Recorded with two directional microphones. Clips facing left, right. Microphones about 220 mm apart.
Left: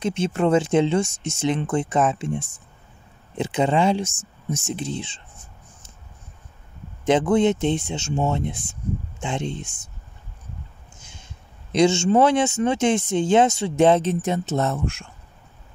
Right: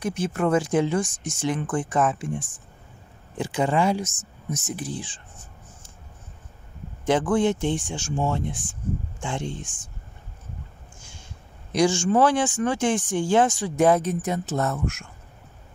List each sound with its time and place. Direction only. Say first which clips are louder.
0.0 s speech: left 3 dB; 25° left (ahead or behind)
7.1 s speech: left 3 dB; 20° left (ahead or behind)
11.0 s a sound: left 1 dB; 20° left (ahead or behind)
11.7 s speech: left 3 dB; 25° left (ahead or behind)